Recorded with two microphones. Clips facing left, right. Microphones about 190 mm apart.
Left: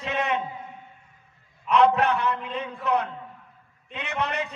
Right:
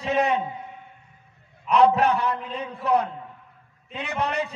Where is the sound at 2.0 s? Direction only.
35° right (ahead or behind).